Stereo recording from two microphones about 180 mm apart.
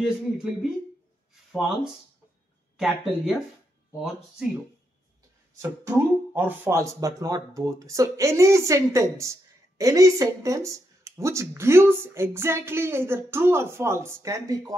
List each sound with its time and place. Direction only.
0.0 s speech: centre (ahead or behind)
5.6 s speech: 15° right (ahead or behind)